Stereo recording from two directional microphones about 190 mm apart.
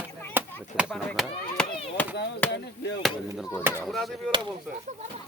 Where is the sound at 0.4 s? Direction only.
10° right (ahead or behind); by 2.1 s 10° left (ahead or behind).